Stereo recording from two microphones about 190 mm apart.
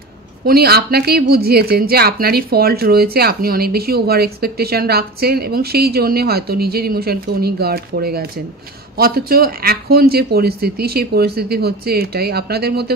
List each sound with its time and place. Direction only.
0.5 s speech: 55° right (ahead or behind)